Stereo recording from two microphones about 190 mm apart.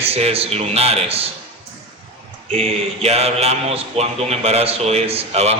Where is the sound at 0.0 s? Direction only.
30° right (ahead or behind).